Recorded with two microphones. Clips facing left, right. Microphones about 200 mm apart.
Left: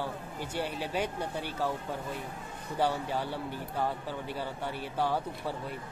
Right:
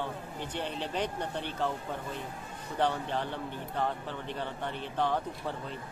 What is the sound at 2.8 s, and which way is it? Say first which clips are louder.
Speech: even; 10° left (ahead or behind).